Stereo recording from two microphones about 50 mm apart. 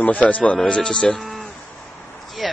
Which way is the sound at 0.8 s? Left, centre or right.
Centre.